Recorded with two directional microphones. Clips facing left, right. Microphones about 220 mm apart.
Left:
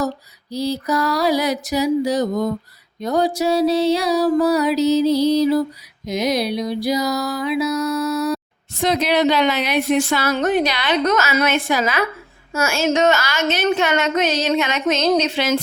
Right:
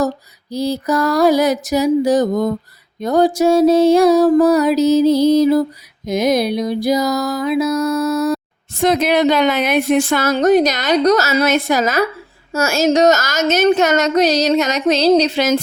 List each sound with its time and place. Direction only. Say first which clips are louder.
0.5 s music: right 3 dB; 50° right (ahead or behind)
10.3 s a woman's voice: right 8 dB; 40° right (ahead or behind)